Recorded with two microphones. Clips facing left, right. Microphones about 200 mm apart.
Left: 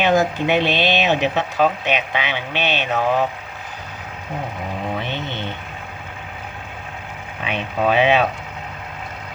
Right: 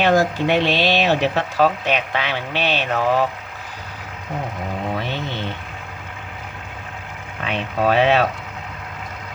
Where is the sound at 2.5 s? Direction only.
35° right (ahead or behind).